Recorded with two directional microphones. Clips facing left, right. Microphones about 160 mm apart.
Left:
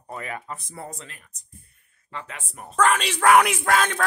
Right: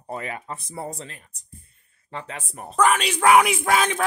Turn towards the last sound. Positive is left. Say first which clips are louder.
# right 1 dB
turn(degrees=-10)  # may be behind; listen again after turning